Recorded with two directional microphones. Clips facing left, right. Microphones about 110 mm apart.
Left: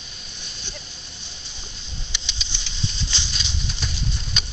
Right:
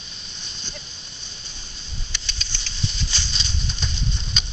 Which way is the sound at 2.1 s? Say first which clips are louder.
Right 1 dB; 15° left (ahead or behind).